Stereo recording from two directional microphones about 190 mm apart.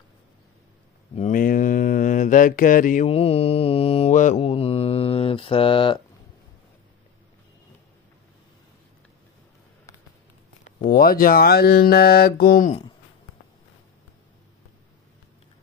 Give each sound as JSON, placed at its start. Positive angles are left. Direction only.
{"t": 1.1, "sound": "mantra", "side_deg": 40}
{"t": 3.1, "sound": "mantra", "side_deg": 30}
{"t": 4.4, "sound": "speech", "side_deg": 30}
{"t": 10.6, "sound": "speech", "side_deg": 45}